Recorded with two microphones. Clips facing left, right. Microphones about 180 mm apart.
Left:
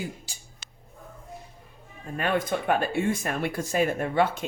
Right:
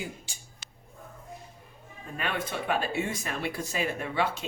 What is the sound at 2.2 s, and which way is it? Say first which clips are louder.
Speech: left 6 dB; 45° left (ahead or behind).